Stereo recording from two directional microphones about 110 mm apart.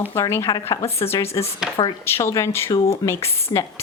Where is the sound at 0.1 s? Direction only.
25° left (ahead or behind).